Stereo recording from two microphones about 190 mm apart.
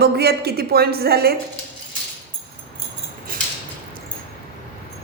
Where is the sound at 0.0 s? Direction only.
55° right (ahead or behind).